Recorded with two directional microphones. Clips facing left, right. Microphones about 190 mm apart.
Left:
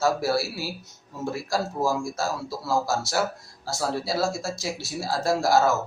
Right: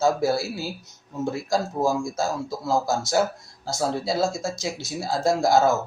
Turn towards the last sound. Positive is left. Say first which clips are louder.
# right 2 dB
turn(degrees=-20)  # may be behind; listen again after turning